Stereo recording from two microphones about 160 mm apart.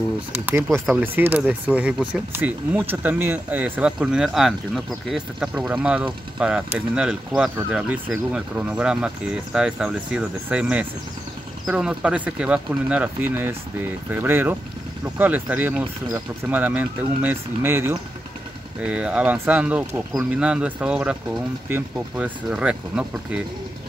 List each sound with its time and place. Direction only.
1.0 s speech: 10° right (ahead or behind)